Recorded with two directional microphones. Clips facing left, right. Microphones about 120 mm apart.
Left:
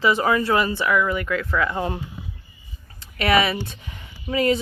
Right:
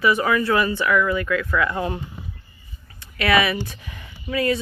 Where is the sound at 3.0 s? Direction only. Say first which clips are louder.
Even; 25° left (ahead or behind).